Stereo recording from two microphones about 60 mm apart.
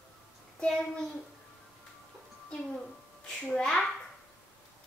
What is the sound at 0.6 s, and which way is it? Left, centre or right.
Child singing, centre.